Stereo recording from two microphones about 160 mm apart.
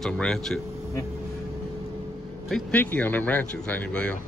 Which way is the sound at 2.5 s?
10° left (ahead or behind).